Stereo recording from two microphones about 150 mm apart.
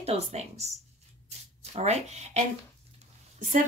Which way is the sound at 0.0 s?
45° right (ahead or behind).